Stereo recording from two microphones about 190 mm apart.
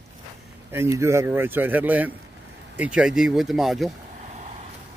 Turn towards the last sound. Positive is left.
turn(degrees=0)  # may be behind; listen again after turning